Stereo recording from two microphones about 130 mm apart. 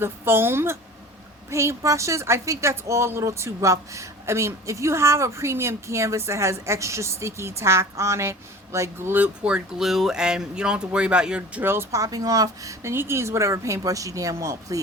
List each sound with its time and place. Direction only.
0.0 s a woman's voice: 20° right (ahead or behind)